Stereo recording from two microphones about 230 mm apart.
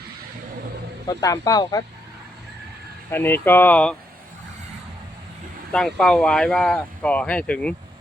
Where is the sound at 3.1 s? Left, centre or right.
Centre.